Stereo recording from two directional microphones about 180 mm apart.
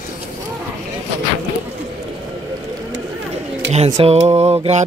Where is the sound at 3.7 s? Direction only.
40° right (ahead or behind).